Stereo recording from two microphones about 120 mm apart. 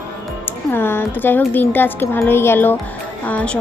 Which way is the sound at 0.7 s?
20° left (ahead or behind).